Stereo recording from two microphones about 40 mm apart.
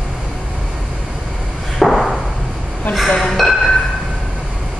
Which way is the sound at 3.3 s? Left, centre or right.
Centre.